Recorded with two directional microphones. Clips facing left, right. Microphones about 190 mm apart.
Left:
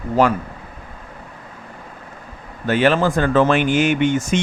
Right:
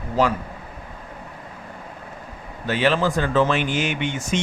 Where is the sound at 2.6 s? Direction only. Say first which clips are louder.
Left 4 dB; 50° left (ahead or behind).